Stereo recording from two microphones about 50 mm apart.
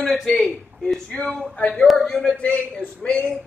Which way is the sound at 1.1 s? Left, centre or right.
Left.